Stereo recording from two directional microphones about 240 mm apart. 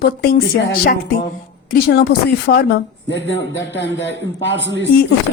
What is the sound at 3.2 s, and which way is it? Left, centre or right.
A woman's voice, left.